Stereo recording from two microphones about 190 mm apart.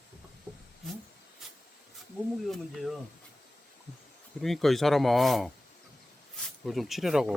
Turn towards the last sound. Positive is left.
turn(degrees=0)  # may be behind; listen again after turning